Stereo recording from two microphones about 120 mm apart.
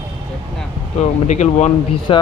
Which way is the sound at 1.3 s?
75° left (ahead or behind).